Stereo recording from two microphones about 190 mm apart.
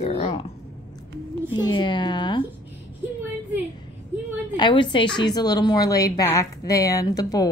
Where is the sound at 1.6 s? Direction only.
25° left (ahead or behind).